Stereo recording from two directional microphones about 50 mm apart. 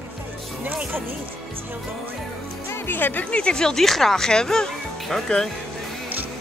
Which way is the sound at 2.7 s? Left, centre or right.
Left.